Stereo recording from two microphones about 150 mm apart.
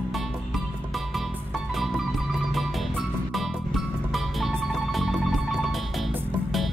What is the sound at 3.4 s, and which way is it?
Music, centre (ahead or behind).